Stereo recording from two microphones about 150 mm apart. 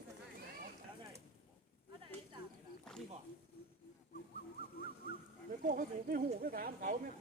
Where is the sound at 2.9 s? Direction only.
5° left (ahead or behind).